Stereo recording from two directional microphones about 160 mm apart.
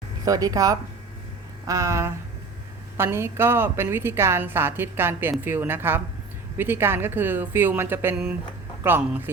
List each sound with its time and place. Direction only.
0.3 s a woman's voice: 20° right (ahead or behind)